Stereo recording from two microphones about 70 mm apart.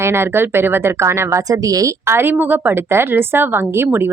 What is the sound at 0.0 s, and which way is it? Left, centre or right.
Speech, right.